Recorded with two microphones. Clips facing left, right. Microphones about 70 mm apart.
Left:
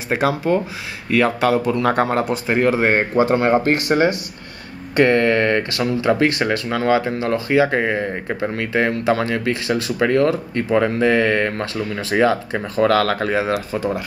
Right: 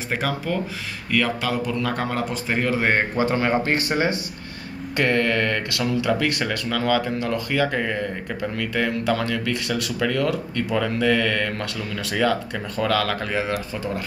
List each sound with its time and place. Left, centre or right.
0.1 s speech: centre
1.2 s speech: left